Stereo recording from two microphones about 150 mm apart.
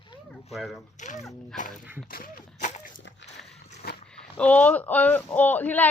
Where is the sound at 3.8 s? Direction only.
90° left.